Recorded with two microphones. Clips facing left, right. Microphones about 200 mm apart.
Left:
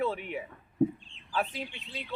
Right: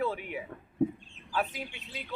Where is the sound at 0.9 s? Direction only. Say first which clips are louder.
Right 3 dB; 45° right (ahead or behind).